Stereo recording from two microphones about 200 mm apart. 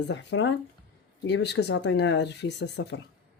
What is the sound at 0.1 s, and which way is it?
Speech, 65° left (ahead or behind).